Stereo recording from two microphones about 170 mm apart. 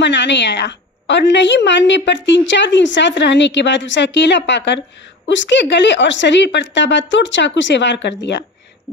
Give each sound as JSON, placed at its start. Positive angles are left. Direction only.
{"t": 0.0, "sound": "a woman's voice", "side_deg": 90}